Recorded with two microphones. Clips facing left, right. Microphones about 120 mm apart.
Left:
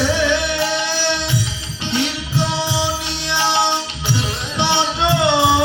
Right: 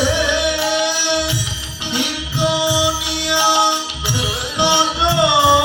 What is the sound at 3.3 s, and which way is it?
Music, 10° right (ahead or behind).